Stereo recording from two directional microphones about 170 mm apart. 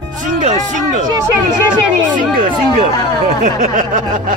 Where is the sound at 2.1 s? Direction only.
50° right (ahead or behind).